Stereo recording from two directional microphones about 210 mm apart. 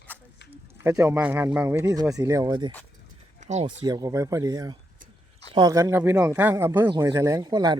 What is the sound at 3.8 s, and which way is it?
Speech, 20° right (ahead or behind).